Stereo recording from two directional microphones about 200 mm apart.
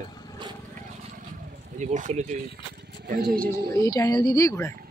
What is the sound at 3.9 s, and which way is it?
Speech, 20° left (ahead or behind).